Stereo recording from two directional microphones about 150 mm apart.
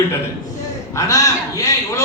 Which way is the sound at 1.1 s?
20° left (ahead or behind).